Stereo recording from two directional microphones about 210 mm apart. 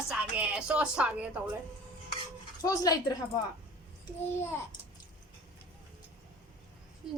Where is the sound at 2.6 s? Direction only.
15° left (ahead or behind).